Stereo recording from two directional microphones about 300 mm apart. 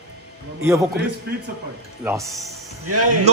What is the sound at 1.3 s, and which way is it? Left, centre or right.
Speech, right.